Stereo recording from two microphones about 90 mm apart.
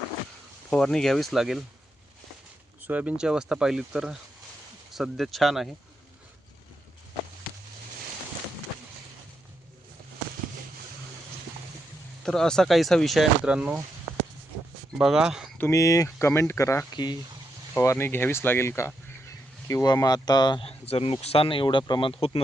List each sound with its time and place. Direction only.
0.7 s speech: 10° left (ahead or behind)
2.8 s speech: 15° right (ahead or behind); by 5.6 s centre (ahead or behind)
12.2 s speech: 5° left (ahead or behind)
13.4 s speech: 10° right (ahead or behind)
14.9 s speech: 10° right (ahead or behind)
15.7 s speech: 35° left (ahead or behind)
16.9 s speech: 55° left (ahead or behind)
17.7 s speech: 30° left (ahead or behind); by 20.6 s 50° left (ahead or behind)
20.6 s speech: 90° left; by 22.1 s 60° left (ahead or behind)